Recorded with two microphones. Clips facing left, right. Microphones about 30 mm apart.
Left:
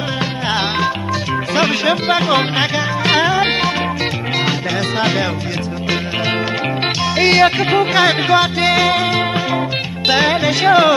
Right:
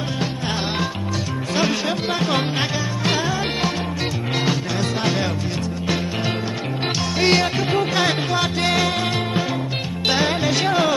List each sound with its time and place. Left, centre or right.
1.5 s music: left
7.2 s music: left